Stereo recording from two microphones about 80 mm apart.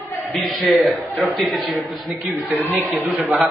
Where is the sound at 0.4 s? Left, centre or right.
Centre.